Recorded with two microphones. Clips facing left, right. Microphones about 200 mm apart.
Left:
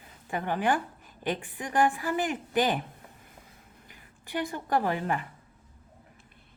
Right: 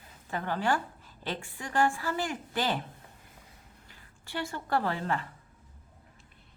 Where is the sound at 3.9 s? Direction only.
15° left (ahead or behind).